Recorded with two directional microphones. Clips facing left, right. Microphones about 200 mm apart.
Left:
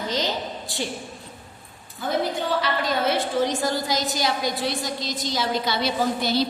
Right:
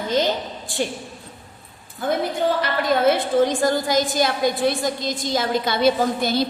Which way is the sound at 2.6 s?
50° right (ahead or behind).